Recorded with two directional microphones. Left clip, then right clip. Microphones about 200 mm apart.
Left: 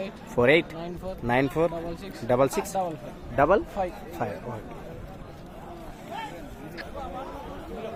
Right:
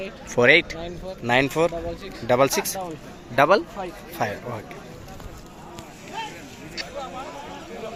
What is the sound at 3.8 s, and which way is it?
Speech, 60° left (ahead or behind).